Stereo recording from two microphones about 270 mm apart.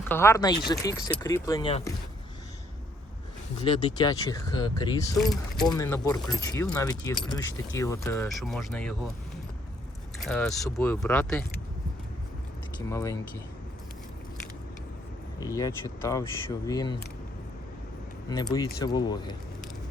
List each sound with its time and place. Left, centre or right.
0.1 s speech: centre
3.6 s speech: centre
5.1 s speech: centre
5.7 s speech: centre
10.2 s speech: centre
12.9 s speech: centre
15.4 s speech: centre
18.3 s speech: centre